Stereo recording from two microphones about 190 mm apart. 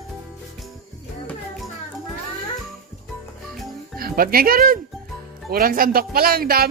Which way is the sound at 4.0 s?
50° right (ahead or behind).